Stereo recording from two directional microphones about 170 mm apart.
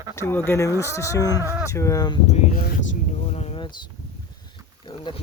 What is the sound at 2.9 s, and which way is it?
Speech, 40° left (ahead or behind).